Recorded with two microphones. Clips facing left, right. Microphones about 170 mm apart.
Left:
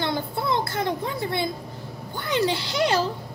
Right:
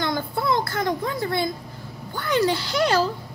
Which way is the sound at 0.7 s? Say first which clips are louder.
Right 2 dB; 25° left (ahead or behind).